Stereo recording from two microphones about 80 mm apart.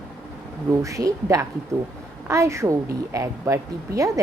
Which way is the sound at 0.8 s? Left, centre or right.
Right.